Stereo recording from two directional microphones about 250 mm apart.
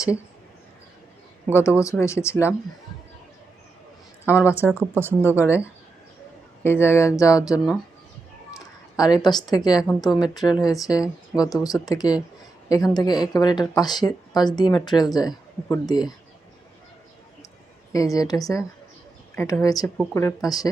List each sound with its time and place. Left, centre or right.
1.5 s speech: centre
4.3 s speech: centre
4.5 s speech: centre
5.5 s speech: centre
17.9 s speech: centre